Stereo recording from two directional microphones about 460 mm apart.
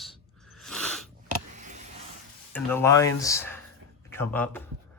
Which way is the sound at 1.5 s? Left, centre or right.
Centre.